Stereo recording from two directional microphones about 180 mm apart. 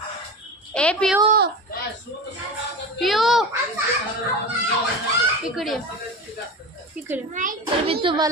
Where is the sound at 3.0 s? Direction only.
Centre (ahead or behind).